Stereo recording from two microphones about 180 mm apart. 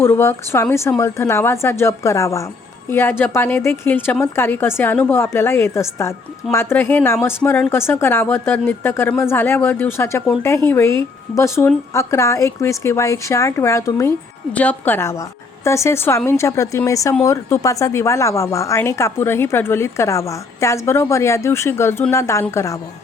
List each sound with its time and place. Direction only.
0.0 s a woman's voice: 15° left (ahead or behind)